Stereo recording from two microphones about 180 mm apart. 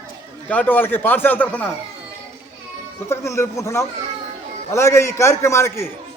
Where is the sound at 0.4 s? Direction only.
10° left (ahead or behind).